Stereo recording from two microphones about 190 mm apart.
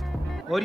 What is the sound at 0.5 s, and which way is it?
Speech, centre (ahead or behind).